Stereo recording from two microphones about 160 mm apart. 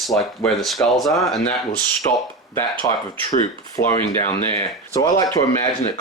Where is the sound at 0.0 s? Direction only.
Centre (ahead or behind).